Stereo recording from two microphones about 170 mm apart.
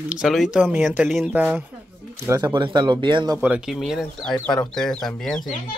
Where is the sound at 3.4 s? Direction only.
5° right (ahead or behind).